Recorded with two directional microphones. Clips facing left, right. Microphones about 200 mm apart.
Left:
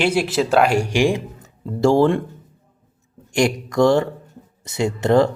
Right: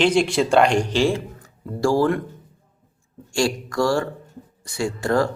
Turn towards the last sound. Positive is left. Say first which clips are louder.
# left 5 dB
turn(degrees=20)  # may be behind; listen again after turning